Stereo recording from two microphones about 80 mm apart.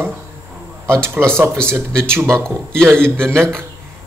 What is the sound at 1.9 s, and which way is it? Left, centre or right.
Speech, centre.